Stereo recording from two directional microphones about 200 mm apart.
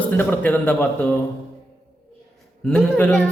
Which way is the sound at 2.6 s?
5° left (ahead or behind).